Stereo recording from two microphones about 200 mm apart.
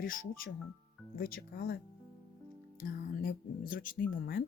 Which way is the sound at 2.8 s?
45° left (ahead or behind).